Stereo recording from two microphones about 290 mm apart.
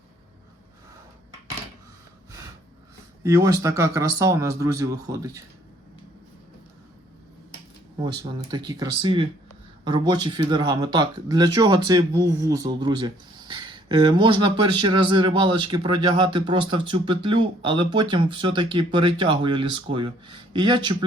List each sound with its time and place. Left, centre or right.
3.2 s speech: centre
8.0 s speech: centre